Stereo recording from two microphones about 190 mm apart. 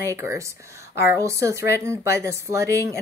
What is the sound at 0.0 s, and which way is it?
Speech, 15° right (ahead or behind).